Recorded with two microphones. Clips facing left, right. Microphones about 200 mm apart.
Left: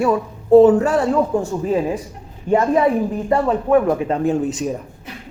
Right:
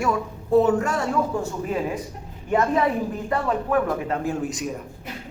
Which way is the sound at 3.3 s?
25° left (ahead or behind).